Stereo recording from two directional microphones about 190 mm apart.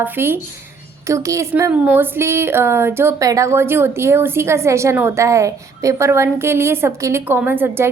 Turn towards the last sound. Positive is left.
turn(degrees=-10)  # may be behind; listen again after turning